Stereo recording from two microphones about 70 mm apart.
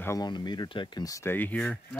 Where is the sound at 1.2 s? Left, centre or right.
Left.